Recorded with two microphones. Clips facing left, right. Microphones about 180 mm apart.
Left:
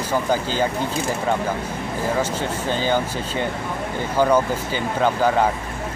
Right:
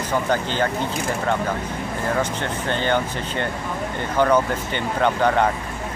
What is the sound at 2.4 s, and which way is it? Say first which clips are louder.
Speech: left 1 dB; 5° left (ahead or behind).